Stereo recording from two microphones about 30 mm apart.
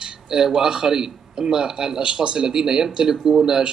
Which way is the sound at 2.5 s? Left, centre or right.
Centre.